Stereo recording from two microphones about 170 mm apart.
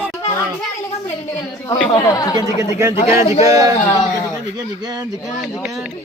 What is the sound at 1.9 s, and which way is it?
Speech, 20° left (ahead or behind).